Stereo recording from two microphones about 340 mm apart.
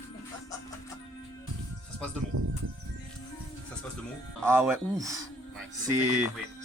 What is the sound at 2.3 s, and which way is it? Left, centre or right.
Speech, right.